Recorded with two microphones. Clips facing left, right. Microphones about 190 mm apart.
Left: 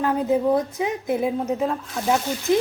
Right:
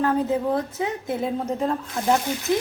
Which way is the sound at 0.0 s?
15° left (ahead or behind).